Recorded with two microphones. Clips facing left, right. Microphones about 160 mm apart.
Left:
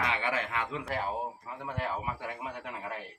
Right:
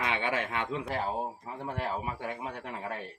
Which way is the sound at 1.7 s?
30° right (ahead or behind).